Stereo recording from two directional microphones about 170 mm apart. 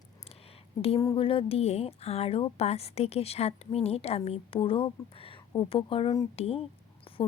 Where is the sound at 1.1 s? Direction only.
30° left (ahead or behind).